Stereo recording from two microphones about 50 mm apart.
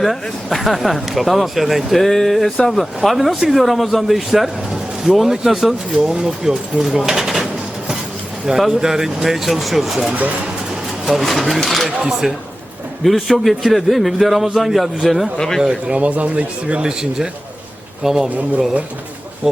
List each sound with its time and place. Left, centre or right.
0.0 s speech: centre
8.4 s speech: centre
13.1 s speech: centre
15.6 s speech: centre
16.0 s speech: right
16.8 s speech: centre